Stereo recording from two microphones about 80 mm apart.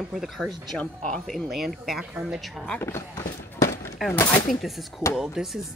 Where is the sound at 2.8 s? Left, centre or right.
Left.